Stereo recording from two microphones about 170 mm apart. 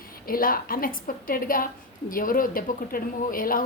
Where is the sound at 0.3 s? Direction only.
60° left (ahead or behind).